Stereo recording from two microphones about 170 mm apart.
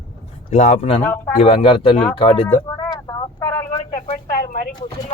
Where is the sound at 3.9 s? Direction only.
55° left (ahead or behind).